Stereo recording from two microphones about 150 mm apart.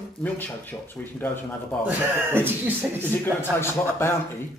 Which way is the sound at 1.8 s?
15° right (ahead or behind).